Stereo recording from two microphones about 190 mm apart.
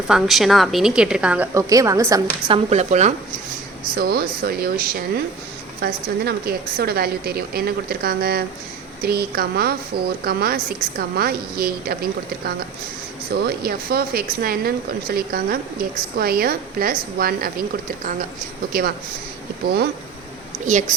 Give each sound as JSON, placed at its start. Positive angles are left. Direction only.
{"t": 0.1, "sound": "a woman's voice", "side_deg": 0}
{"t": 2.5, "sound": "speech", "side_deg": -35}
{"t": 3.9, "sound": "a woman's voice", "side_deg": -55}
{"t": 13.3, "sound": "speech", "side_deg": -55}
{"t": 20.7, "sound": "speech", "side_deg": -40}